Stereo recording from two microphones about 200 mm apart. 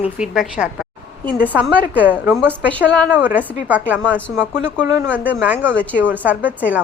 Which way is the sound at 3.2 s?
10° right (ahead or behind).